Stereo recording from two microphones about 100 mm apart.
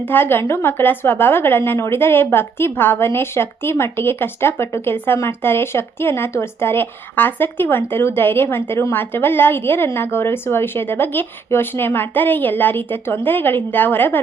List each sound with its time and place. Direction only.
0.1 s a woman's voice: 20° left (ahead or behind)